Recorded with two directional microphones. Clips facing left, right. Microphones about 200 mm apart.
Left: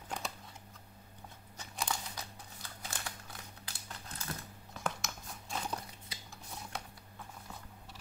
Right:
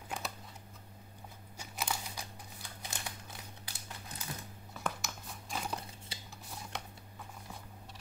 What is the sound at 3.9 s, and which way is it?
Typing, 15° right (ahead or behind).